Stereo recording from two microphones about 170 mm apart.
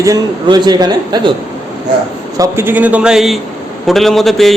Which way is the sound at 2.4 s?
15° right (ahead or behind).